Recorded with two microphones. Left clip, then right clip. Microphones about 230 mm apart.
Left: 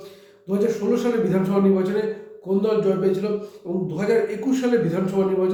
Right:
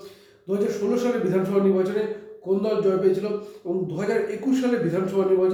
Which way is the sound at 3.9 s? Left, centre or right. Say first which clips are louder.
Left 6 dB; centre.